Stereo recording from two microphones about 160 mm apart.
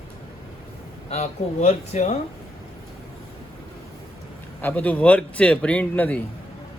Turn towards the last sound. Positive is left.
turn(degrees=10)  # may be behind; listen again after turning